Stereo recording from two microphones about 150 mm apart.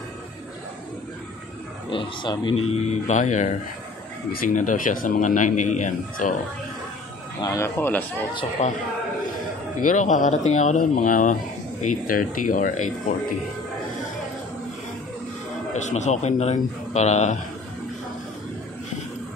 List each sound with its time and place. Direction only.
1.9 s speech: 35° left (ahead or behind)
2.9 s a man's voice: 55° left (ahead or behind)
4.3 s a man's voice: 65° left (ahead or behind)
7.4 s speech: 20° left (ahead or behind)
8.6 s a man's voice: 50° left (ahead or behind)
9.8 s a man's voice: 55° left (ahead or behind)
15.7 s a man's voice: 50° left (ahead or behind)